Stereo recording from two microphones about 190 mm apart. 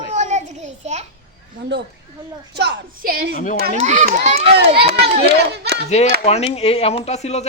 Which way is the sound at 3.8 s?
35° right (ahead or behind).